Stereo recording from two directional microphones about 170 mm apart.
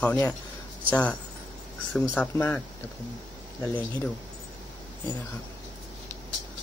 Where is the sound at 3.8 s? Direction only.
10° left (ahead or behind).